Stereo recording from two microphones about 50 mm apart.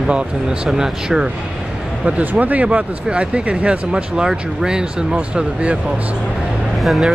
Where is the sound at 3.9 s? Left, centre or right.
Centre.